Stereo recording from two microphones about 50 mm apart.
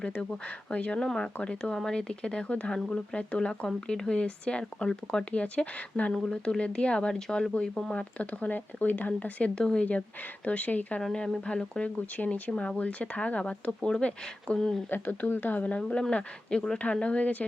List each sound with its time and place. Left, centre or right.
0.0 s speech: centre
1.4 s speech: left
1.7 s speech: centre; by 9.5 s left
9.6 s speech: centre
10.4 s speech: left
11.0 s speech: centre
11.9 s speech: left; by 14.8 s centre
14.8 s speech: left
15.6 s speech: left